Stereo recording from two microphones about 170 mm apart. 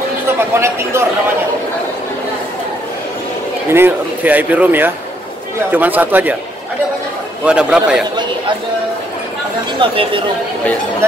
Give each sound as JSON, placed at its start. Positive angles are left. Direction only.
{"t": 0.6, "sound": "speech", "side_deg": -15}
{"t": 3.7, "sound": "speech", "side_deg": -10}
{"t": 7.4, "sound": "a man's voice", "side_deg": -5}
{"t": 9.8, "sound": "speech", "side_deg": -30}